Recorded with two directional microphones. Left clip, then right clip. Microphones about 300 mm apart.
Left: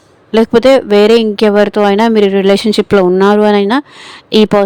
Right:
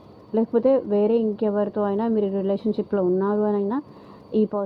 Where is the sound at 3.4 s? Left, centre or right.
Left.